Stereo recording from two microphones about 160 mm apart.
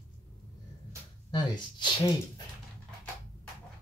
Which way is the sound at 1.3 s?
25° left (ahead or behind).